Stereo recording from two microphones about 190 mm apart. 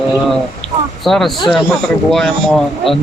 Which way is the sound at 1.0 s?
Centre (ahead or behind).